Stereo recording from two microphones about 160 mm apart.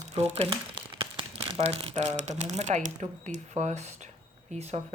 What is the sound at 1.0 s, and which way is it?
Crumpling, 35° right (ahead or behind).